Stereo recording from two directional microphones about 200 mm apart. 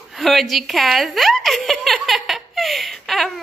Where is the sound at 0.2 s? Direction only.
Centre (ahead or behind).